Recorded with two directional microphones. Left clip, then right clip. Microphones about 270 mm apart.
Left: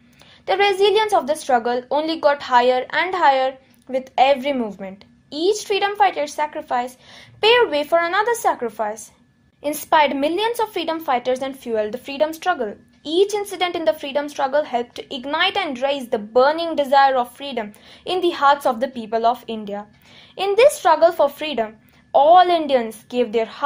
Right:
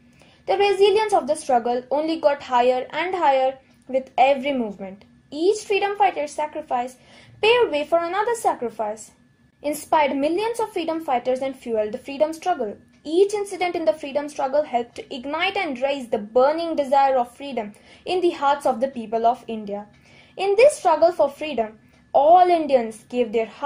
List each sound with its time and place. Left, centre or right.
0.5 s a woman's voice: centre